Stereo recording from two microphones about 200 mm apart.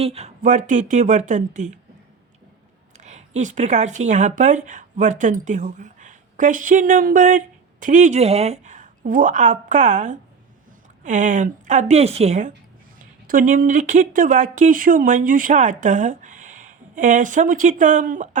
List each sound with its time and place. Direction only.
0.0 s speech: 30° right (ahead or behind)
3.0 s speech: 35° right (ahead or behind)